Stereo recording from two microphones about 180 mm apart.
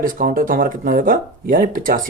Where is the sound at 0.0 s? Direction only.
50° right (ahead or behind).